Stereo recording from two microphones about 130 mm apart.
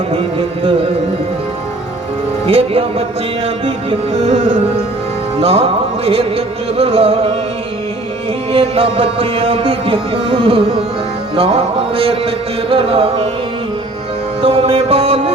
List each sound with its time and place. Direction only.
0.1 s music: 45° right (ahead or behind)
2.5 s music: 45° right (ahead or behind)
8.5 s music: 50° right (ahead or behind)
14.4 s music: 45° right (ahead or behind)